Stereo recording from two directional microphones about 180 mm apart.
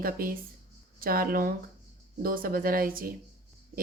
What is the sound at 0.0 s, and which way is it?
A woman's voice, 55° right (ahead or behind).